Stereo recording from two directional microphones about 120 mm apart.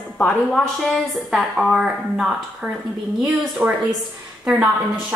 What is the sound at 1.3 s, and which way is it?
A woman's voice, centre (ahead or behind).